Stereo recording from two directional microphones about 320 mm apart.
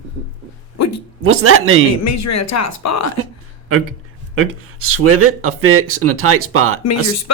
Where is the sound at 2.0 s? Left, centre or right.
Left.